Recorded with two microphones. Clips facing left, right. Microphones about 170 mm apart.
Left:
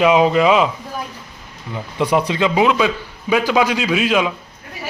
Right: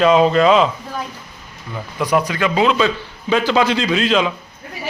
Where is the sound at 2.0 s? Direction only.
25° left (ahead or behind); by 4.3 s 10° left (ahead or behind).